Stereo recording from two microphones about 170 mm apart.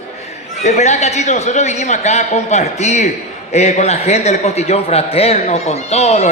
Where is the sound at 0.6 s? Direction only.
40° left (ahead or behind).